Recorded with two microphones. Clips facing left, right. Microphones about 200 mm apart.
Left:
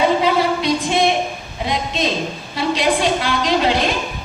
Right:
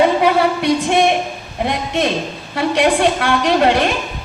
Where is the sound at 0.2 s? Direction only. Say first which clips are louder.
Right 2 dB; 65° right (ahead or behind).